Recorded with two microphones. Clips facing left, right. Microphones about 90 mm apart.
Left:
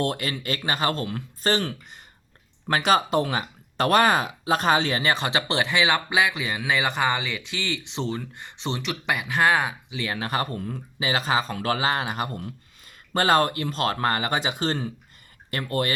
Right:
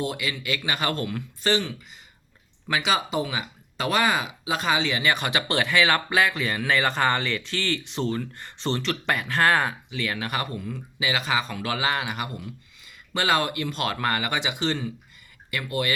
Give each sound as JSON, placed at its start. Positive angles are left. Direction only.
{"t": 0.0, "sound": "speech", "side_deg": 50}
{"t": 1.4, "sound": "speech", "side_deg": 40}